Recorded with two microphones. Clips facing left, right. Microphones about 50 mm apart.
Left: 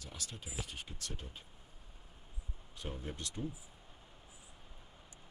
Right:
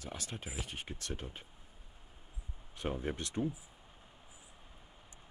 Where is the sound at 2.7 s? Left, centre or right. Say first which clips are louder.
Right 7 dB; right.